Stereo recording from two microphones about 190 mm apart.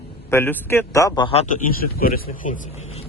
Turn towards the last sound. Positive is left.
turn(degrees=35)  # may be behind; listen again after turning